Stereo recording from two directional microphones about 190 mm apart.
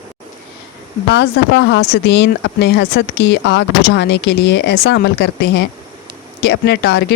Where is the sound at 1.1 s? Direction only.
65° left (ahead or behind).